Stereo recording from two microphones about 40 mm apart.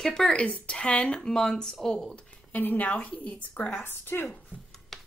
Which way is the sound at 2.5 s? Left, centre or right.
Left.